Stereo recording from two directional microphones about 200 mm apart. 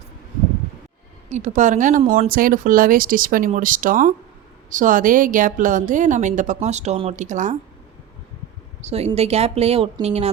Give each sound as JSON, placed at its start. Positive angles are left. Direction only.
{"t": 1.3, "sound": "a woman's voice", "side_deg": -35}
{"t": 8.8, "sound": "a woman's voice", "side_deg": -30}